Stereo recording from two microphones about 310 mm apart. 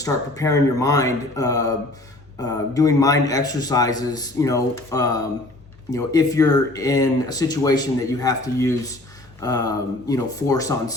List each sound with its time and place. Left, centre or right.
0.0 s speech: centre